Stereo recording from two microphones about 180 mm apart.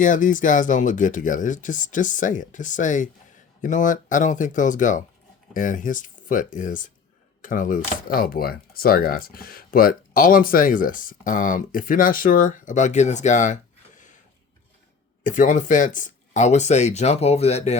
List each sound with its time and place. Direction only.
0.0 s speech: 45° left (ahead or behind)
15.2 s speech: 45° left (ahead or behind)